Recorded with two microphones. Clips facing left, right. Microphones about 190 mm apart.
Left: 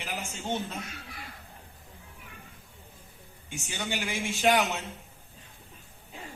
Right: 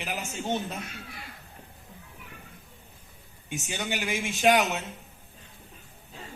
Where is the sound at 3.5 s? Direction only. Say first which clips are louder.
Right 2 dB; 15° right (ahead or behind).